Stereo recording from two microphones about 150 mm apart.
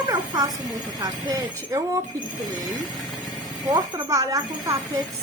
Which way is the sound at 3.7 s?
25° right (ahead or behind).